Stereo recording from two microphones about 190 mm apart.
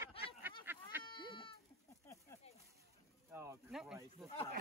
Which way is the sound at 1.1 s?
25° left (ahead or behind).